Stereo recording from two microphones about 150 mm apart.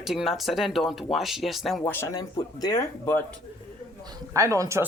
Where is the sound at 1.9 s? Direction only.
15° left (ahead or behind).